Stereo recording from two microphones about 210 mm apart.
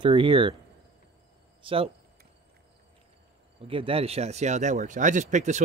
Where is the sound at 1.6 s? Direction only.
25° right (ahead or behind).